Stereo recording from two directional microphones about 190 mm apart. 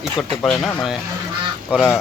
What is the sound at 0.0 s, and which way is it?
A man's voice, centre (ahead or behind).